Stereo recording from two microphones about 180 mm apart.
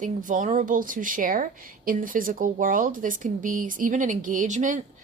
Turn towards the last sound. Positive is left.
turn(degrees=-45)  # may be behind; listen again after turning